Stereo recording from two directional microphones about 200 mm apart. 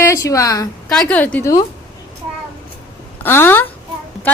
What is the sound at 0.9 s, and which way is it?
Speech, 5° left (ahead or behind).